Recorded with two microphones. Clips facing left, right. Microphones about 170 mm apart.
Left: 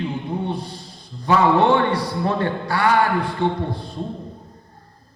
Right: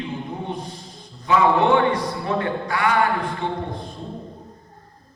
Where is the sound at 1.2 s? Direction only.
35° left (ahead or behind).